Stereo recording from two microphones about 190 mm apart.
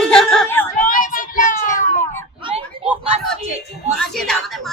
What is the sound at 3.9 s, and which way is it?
Speech, centre (ahead or behind).